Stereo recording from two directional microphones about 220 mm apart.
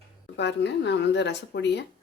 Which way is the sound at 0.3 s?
50° left (ahead or behind).